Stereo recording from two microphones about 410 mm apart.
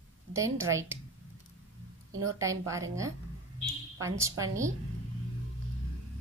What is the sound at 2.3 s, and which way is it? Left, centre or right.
A woman's voice, centre.